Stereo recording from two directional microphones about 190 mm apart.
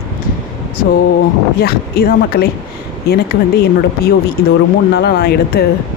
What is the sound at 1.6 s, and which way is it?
Speech, 55° left (ahead or behind).